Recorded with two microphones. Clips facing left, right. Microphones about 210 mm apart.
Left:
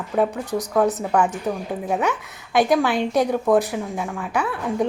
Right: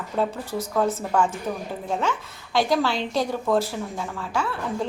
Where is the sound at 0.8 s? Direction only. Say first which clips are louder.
Left 2 dB; 70° left (ahead or behind).